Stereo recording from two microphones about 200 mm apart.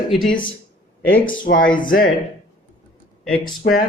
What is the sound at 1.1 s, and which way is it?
Speech, 45° left (ahead or behind).